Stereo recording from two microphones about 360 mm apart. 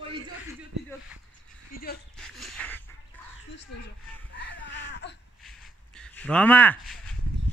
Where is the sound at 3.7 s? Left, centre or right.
Left.